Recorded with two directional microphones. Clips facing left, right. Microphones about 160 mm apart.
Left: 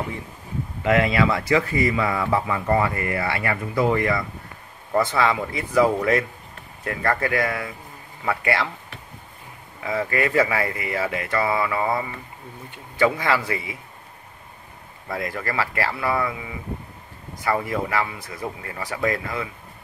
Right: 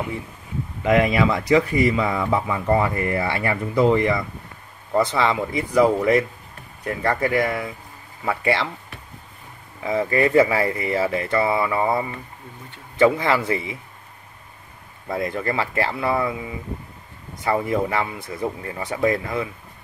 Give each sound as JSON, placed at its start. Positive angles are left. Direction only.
{"t": 0.8, "sound": "speech", "side_deg": -20}
{"t": 9.8, "sound": "speech", "side_deg": -25}
{"t": 15.0, "sound": "speech", "side_deg": -25}
{"t": 17.6, "sound": "speech", "side_deg": -25}